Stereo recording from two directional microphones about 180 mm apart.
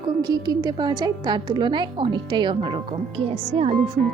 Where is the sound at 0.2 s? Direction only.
20° right (ahead or behind).